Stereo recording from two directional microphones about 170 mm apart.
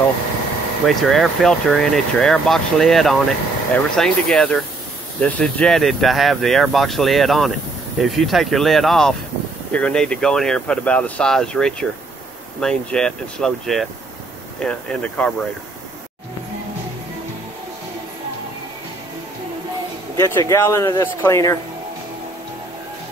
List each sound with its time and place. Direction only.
0.8 s speech: centre (ahead or behind)
20.2 s speech: 15° left (ahead or behind)